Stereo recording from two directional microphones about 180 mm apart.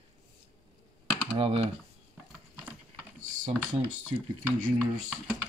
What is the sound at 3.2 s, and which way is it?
Typing, 45° right (ahead or behind).